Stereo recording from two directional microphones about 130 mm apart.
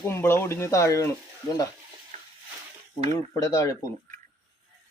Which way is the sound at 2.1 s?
50° right (ahead or behind).